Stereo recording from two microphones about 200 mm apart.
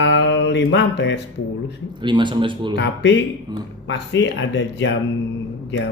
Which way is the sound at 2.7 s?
60° left (ahead or behind).